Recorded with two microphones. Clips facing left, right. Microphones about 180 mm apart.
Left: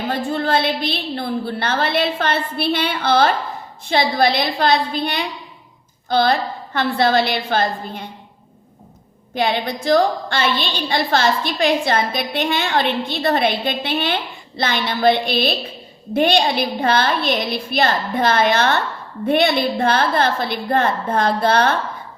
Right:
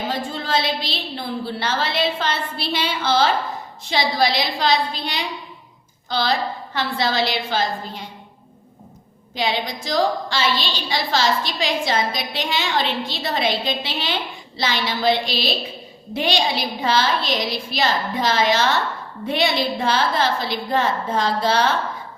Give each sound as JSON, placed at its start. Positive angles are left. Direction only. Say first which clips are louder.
{"t": 0.1, "sound": "a woman's voice", "louder": "left 7 dB", "side_deg": 60}
{"t": 9.3, "sound": "a woman's voice", "louder": "left 4 dB", "side_deg": 55}